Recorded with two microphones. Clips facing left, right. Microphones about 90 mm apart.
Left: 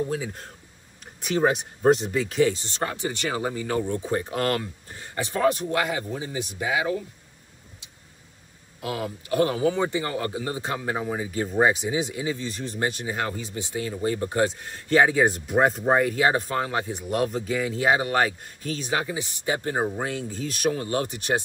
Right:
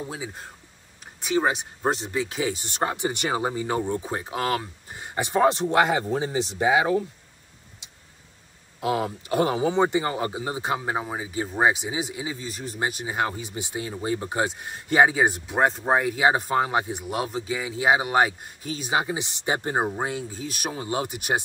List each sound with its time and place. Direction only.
0.1 s speech: 10° right (ahead or behind)
2.8 s speech: 20° right (ahead or behind)
8.8 s speech: 25° right (ahead or behind)
17.0 s speech: 5° right (ahead or behind)
20.2 s speech: 10° right (ahead or behind)